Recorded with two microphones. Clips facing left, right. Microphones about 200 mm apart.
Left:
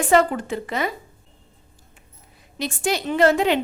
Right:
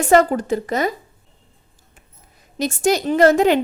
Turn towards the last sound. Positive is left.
turn(degrees=-45)  # may be behind; listen again after turning